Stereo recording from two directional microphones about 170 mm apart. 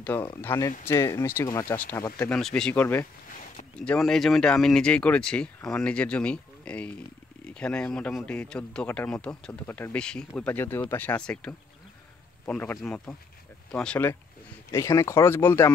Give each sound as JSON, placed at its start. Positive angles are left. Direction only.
{"t": 0.0, "sound": "a man's voice", "side_deg": 10}